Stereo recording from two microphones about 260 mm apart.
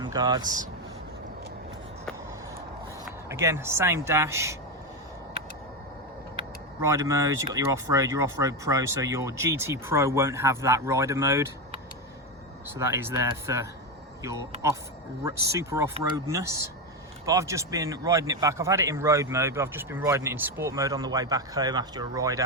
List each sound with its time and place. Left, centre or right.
0.0 s speech: centre
3.2 s speech: centre
6.8 s speech: centre
12.7 s speech: centre